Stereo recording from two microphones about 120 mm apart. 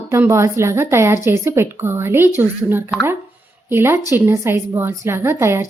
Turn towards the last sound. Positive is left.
turn(degrees=-25)  # may be behind; listen again after turning